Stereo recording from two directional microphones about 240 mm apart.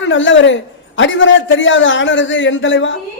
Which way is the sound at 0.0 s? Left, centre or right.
Left.